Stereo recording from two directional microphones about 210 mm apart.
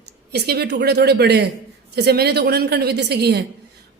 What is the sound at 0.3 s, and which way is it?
A man's voice, 50° right (ahead or behind).